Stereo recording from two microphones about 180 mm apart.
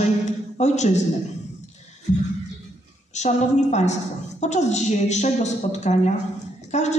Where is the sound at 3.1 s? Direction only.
40° left (ahead or behind).